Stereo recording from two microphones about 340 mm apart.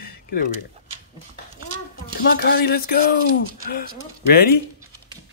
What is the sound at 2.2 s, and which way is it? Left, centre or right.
Speech, left.